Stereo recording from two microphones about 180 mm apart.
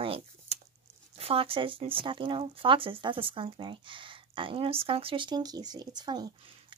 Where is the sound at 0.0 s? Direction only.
30° right (ahead or behind).